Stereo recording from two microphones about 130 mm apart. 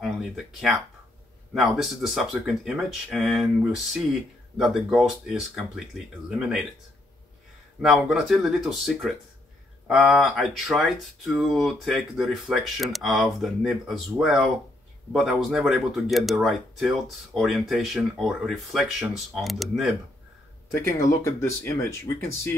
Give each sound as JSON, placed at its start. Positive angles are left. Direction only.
{"t": 0.0, "sound": "speech", "side_deg": 0}
{"t": 7.8, "sound": "speech", "side_deg": 0}
{"t": 21.0, "sound": "speech", "side_deg": 20}